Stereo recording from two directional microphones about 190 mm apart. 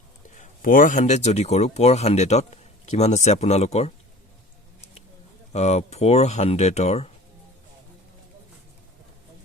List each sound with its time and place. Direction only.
0.3 s speech: 45° left (ahead or behind)
5.5 s speech: 35° left (ahead or behind)